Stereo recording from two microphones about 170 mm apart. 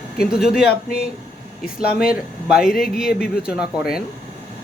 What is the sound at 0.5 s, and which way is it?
Speech, 60° left (ahead or behind).